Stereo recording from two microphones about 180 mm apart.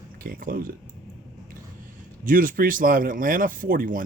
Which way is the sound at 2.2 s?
50° right (ahead or behind).